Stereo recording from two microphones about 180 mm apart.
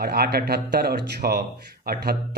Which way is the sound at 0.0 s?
60° right (ahead or behind).